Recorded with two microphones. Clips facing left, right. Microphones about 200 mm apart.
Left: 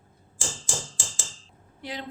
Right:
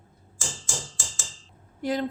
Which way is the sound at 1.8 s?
45° right (ahead or behind).